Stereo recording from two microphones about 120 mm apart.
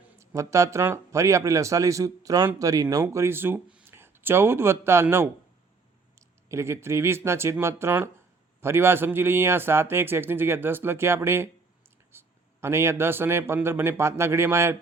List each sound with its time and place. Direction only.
0.2 s speech: 25° right (ahead or behind)